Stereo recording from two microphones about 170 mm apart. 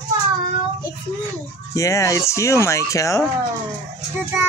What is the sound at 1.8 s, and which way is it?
Speech, 20° left (ahead or behind).